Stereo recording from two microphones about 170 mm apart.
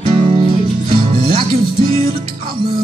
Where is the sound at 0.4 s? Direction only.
30° right (ahead or behind).